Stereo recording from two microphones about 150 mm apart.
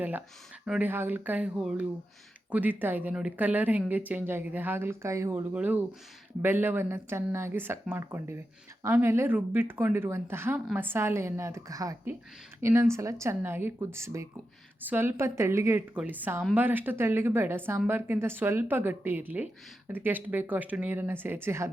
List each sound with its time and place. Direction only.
0.0 s speech: 10° right (ahead or behind)